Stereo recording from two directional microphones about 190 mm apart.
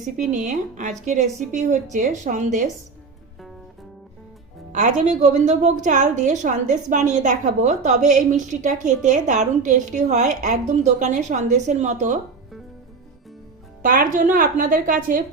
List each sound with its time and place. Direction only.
0.3 s a woman's voice: 40° right (ahead or behind)
4.7 s a woman's voice: 40° right (ahead or behind)
13.8 s a woman's voice: 45° right (ahead or behind)